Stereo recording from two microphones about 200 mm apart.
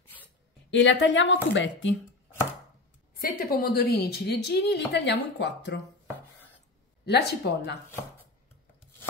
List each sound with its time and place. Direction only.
0.7 s speech: 65° left (ahead or behind)
3.2 s a woman's voice: 50° left (ahead or behind)
7.1 s speech: 55° left (ahead or behind)